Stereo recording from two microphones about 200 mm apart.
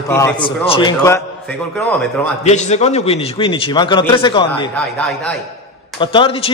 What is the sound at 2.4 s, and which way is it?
A man's voice, 35° left (ahead or behind).